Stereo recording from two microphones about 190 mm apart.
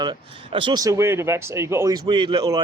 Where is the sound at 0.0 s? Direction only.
25° right (ahead or behind).